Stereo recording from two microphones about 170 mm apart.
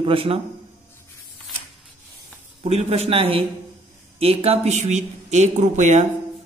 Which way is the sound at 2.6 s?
40° right (ahead or behind).